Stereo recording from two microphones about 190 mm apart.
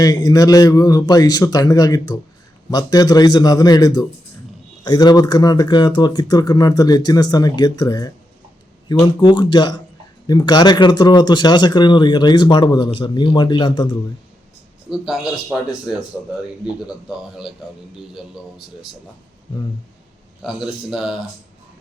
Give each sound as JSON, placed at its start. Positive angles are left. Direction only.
{"t": 0.0, "sound": "speech", "side_deg": 20}
{"t": 14.8, "sound": "speech", "side_deg": -5}
{"t": 18.1, "sound": "speech", "side_deg": 0}
{"t": 20.4, "sound": "speech", "side_deg": -5}